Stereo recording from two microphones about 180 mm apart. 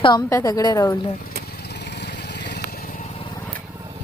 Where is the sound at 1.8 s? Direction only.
70° left (ahead or behind).